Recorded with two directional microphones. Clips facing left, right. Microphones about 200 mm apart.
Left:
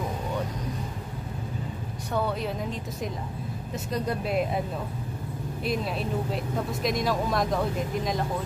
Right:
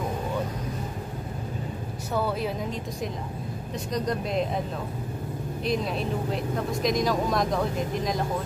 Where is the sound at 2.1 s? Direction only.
5° right (ahead or behind).